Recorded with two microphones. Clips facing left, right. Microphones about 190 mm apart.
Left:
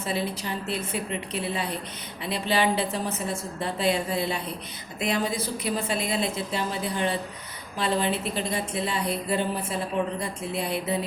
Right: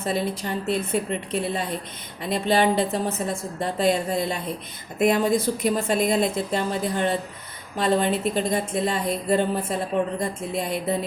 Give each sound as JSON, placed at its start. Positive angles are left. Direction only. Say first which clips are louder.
{"t": 0.0, "sound": "speech", "louder": "right 3 dB", "side_deg": -45}